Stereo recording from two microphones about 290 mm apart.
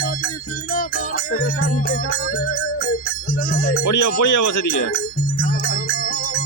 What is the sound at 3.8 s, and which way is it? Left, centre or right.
Speech, left.